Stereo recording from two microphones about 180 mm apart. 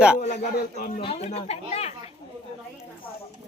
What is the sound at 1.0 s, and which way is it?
Speech, 35° left (ahead or behind).